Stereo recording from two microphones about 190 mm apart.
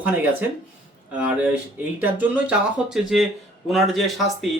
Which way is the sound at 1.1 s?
5° right (ahead or behind).